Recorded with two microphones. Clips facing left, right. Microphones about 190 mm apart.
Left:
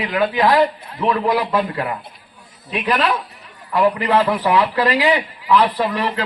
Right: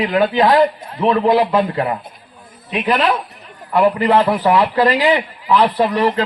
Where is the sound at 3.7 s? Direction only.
30° right (ahead or behind).